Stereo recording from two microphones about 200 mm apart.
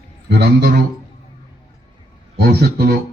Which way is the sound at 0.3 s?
50° right (ahead or behind).